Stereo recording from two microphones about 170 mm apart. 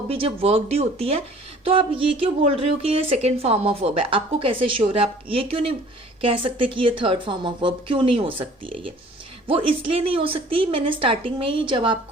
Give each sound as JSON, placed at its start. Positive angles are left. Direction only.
{"t": 0.1, "sound": "a woman's voice", "side_deg": -35}